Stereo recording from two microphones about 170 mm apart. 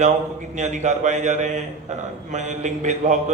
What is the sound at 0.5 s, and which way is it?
Speech, 45° right (ahead or behind).